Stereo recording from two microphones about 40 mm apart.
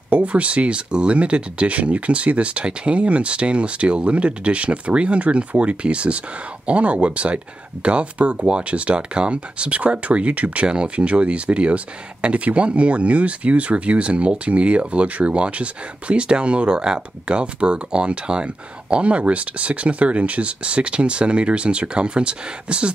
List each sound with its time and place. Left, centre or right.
0.1 s speech: right